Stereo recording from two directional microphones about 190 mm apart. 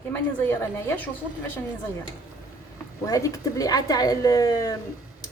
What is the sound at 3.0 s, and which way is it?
A woman's voice, 15° left (ahead or behind).